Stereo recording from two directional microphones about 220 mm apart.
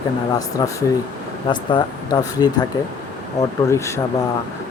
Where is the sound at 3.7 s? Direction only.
15° left (ahead or behind).